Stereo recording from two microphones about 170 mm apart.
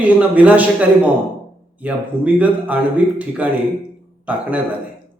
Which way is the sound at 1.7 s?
10° right (ahead or behind).